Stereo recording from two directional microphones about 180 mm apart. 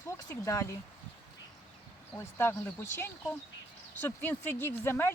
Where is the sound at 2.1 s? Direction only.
10° left (ahead or behind).